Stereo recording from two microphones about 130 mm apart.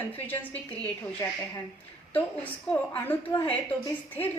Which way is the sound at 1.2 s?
25° left (ahead or behind).